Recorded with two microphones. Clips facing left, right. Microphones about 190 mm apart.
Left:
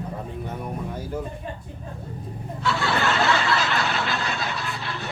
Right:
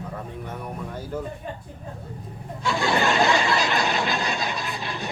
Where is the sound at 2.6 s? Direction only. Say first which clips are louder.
Right 1 dB; 15° right (ahead or behind).